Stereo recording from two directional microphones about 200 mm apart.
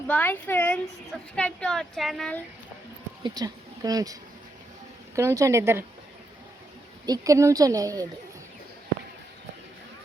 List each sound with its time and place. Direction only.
0.1 s speech: 10° left (ahead or behind)
3.2 s a woman's voice: 20° right (ahead or behind)
7.0 s speech: 15° right (ahead or behind)